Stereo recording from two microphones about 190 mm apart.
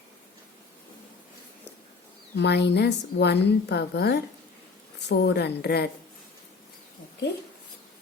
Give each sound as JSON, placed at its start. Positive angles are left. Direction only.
{"t": 2.3, "sound": "a woman's voice", "side_deg": 65}